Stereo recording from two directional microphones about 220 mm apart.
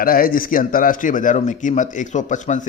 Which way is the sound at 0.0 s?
40° left (ahead or behind).